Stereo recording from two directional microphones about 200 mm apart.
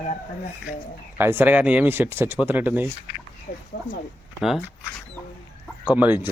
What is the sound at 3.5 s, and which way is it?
Speech, 45° left (ahead or behind).